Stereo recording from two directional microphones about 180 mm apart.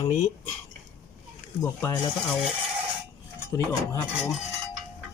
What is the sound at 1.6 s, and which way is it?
Speech, 15° left (ahead or behind).